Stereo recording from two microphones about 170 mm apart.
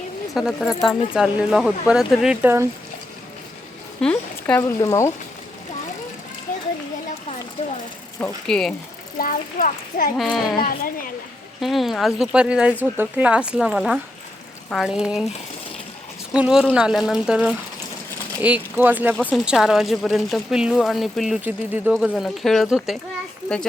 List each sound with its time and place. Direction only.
0.3 s speech: centre (ahead or behind)
4.0 s speech: 10° left (ahead or behind)
7.6 s speech: 40° left (ahead or behind)
8.4 s speech: 5° left (ahead or behind)
9.1 s a child's voice: 55° left (ahead or behind)
10.2 s speech: centre (ahead or behind)
10.4 s speech: 25° left (ahead or behind)
10.7 s a child's voice: 55° left (ahead or behind)
11.6 s speech: centre (ahead or behind)
16.3 s speech: 5° right (ahead or behind)